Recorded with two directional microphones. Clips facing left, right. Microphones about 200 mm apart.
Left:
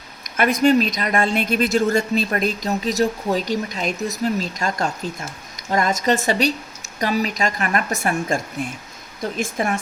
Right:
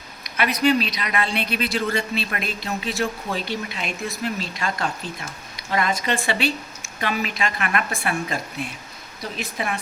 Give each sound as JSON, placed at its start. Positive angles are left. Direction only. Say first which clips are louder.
{"t": 0.3, "sound": "a woman's voice", "louder": "left 4 dB", "side_deg": 50}